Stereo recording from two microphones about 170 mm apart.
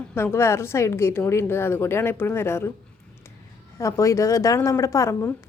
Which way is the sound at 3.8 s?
15° left (ahead or behind).